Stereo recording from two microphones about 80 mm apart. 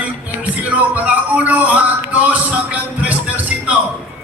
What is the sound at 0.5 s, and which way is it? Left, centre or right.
Music, centre.